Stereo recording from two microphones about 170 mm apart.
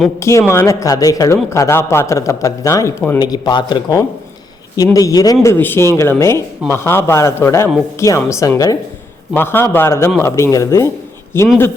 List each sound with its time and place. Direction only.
0.2 s a man's voice: 15° left (ahead or behind)